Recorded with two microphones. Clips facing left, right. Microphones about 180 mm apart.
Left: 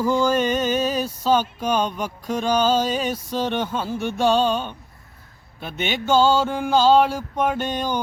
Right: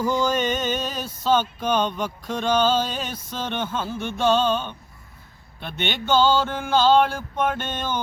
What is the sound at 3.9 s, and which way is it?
Music, 40° left (ahead or behind).